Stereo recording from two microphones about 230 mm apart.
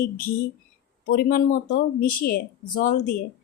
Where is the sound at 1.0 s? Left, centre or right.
Left.